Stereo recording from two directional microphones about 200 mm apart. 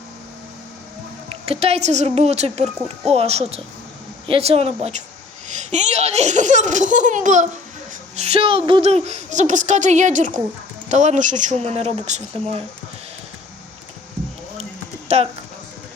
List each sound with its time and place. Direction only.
1.3 s a woman's voice: 30° right (ahead or behind)
14.6 s clip-clop: 30° right (ahead or behind)